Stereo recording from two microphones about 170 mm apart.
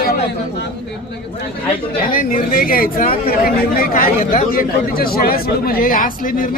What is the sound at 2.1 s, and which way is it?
Speech, 55° left (ahead or behind).